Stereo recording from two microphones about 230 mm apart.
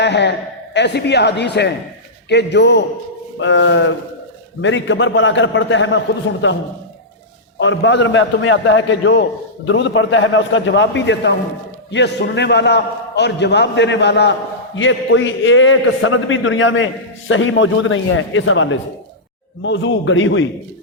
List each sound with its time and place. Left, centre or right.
0.0 s a man's voice: left
7.6 s a man's voice: left